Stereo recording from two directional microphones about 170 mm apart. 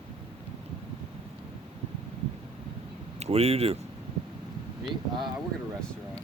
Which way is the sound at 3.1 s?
40° right (ahead or behind).